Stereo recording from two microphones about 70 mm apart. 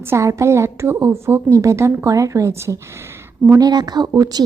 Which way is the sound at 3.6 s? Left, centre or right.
Right.